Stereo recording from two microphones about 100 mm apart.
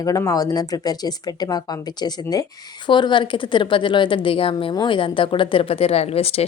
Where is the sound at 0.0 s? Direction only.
35° left (ahead or behind); by 4.7 s 65° left (ahead or behind).